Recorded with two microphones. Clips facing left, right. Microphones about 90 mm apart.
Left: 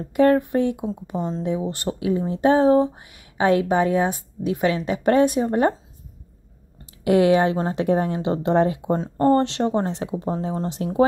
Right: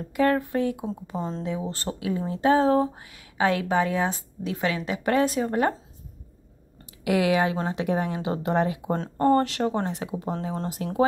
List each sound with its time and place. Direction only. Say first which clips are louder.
0.0 s speech: left 6 dB; 30° left (ahead or behind)
1.1 s speech: left 4 dB; centre (ahead or behind)
1.4 s speech: left 5 dB; 20° left (ahead or behind)
7.1 s speech: left 6 dB; 35° left (ahead or behind)
8.9 s speech: left 5 dB; 5° left (ahead or behind)
9.2 s speech: left 2 dB; 30° left (ahead or behind)